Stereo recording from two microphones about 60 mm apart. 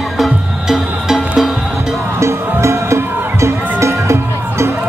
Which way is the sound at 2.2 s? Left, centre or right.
Right.